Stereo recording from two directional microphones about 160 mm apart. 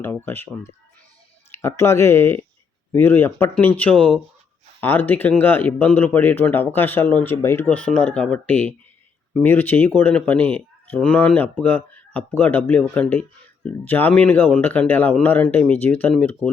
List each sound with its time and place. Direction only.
0.0 s speech: 15° left (ahead or behind)